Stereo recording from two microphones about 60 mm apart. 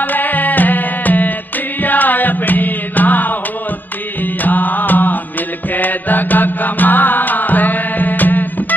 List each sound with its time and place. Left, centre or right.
0.0 s music: left
4.4 s mantra: left